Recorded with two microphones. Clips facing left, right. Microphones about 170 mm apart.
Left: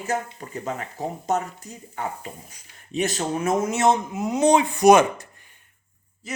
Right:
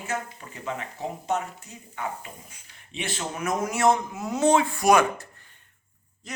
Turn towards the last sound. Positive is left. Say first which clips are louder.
# left 5 dB
turn(degrees=5)  # may be behind; listen again after turning